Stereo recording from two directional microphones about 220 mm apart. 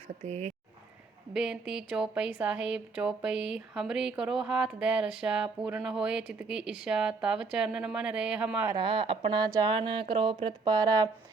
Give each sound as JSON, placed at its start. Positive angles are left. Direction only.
{"t": 0.3, "sound": "speech", "side_deg": -30}
{"t": 1.3, "sound": "speech", "side_deg": -5}
{"t": 8.7, "sound": "speech", "side_deg": -20}